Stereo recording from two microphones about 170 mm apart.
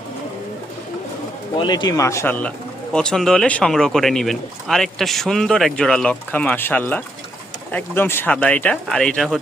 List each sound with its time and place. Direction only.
1.5 s speech: 25° left (ahead or behind); by 9.4 s centre (ahead or behind)